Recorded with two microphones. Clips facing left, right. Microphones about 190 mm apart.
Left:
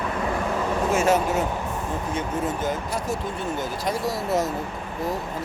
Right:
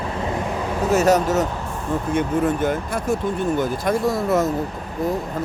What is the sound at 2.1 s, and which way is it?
Speech, 55° right (ahead or behind).